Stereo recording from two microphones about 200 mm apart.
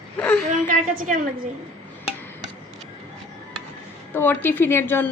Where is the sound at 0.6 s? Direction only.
40° right (ahead or behind).